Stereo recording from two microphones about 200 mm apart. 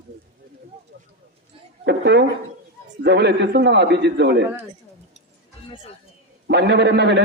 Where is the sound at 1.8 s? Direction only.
60° right (ahead or behind).